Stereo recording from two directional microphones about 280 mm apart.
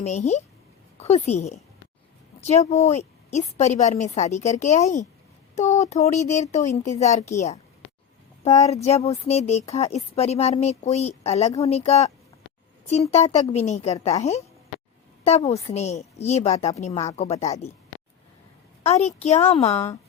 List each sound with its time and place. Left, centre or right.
0.0 s a woman's voice: left
8.7 s speech: left
18.8 s speech: left